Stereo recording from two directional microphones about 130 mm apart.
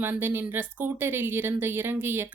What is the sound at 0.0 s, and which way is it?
Speech, 15° right (ahead or behind).